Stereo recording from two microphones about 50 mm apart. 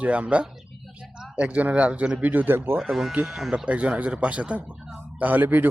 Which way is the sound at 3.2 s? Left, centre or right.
Centre.